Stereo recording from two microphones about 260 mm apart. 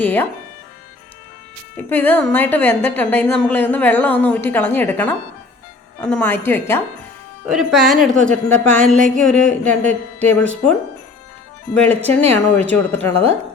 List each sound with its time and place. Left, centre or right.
0.0 s speech: centre
1.7 s a woman's voice: centre
7.4 s speech: centre
11.7 s a woman's voice: centre
12.0 s speech: right
12.5 s speech: centre
13.1 s speech: right